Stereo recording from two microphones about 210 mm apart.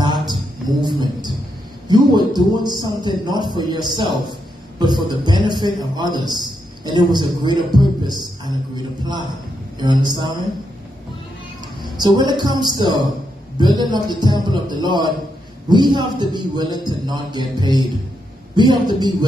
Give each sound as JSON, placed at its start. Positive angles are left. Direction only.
{"t": 0.0, "sound": "a sound", "side_deg": -20}
{"t": 1.9, "sound": "a man's voice", "side_deg": -20}
{"t": 11.8, "sound": "a man's voice", "side_deg": -20}